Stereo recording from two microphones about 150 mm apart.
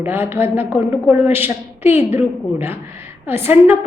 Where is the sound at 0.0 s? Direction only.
15° right (ahead or behind).